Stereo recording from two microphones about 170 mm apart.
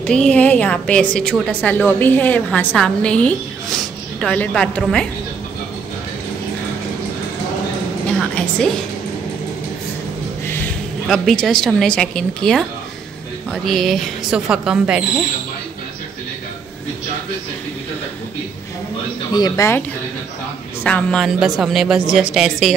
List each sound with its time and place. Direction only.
0.1 s a woman's voice: 5° left (ahead or behind)
8.2 s a sound: 5° left (ahead or behind)
10.4 s a sound: 15° left (ahead or behind)
11.1 s speech: centre (ahead or behind)
19.3 s a woman's voice: 20° left (ahead or behind)
20.8 s speech: 5° left (ahead or behind)